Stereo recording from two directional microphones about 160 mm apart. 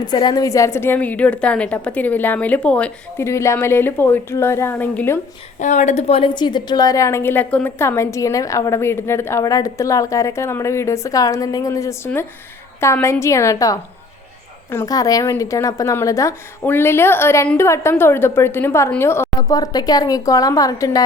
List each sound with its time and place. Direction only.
0.0 s a woman's voice: 25° left (ahead or behind)
5.5 s a woman's voice: 50° left (ahead or behind); by 21.0 s 20° left (ahead or behind)